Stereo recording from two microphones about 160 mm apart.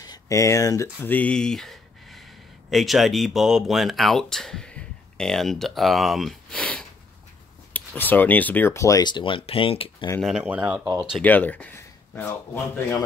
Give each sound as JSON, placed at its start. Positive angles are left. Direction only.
{"t": 0.0, "sound": "speech", "side_deg": 20}
{"t": 10.2, "sound": "speech", "side_deg": -5}
{"t": 11.2, "sound": "speech", "side_deg": 10}